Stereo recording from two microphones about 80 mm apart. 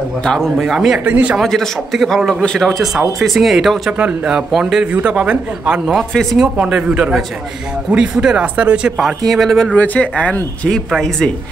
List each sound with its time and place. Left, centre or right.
0.2 s a man's voice: centre
1.0 s speech: right
1.4 s a man's voice: centre
4.9 s speech: centre
5.9 s a man's voice: centre
6.5 s speech: centre
9.8 s speech: centre